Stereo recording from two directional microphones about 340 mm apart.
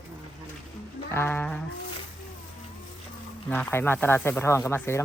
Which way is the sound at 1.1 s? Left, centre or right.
Centre.